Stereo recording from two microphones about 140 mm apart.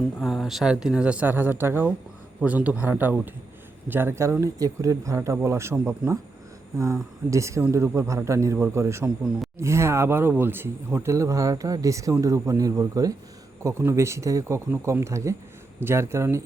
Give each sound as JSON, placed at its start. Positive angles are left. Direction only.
{"t": 0.2, "sound": "speech", "side_deg": 0}
{"t": 9.0, "sound": "a man's voice", "side_deg": -5}
{"t": 9.6, "sound": "speech", "side_deg": -20}